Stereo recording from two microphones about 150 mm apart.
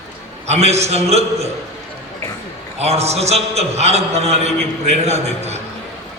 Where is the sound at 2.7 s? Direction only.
45° right (ahead or behind).